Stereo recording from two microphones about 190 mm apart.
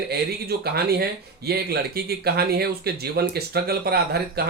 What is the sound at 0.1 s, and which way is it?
Speech, 55° right (ahead or behind).